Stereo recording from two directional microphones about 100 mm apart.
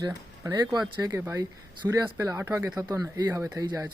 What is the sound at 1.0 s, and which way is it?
Speech, 30° right (ahead or behind).